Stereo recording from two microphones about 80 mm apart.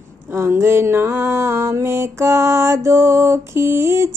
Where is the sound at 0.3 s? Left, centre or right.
Right.